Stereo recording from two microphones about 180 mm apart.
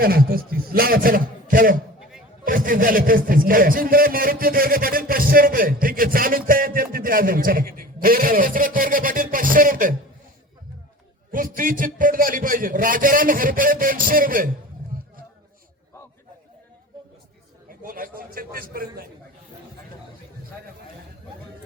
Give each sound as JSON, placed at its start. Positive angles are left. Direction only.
{"t": 0.0, "sound": "a man's voice", "side_deg": -55}
{"t": 11.3, "sound": "a man's voice", "side_deg": -50}
{"t": 17.7, "sound": "a sound", "side_deg": -50}